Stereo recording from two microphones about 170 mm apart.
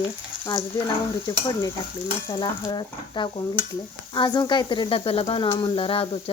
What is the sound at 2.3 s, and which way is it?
Frying, 25° left (ahead or behind).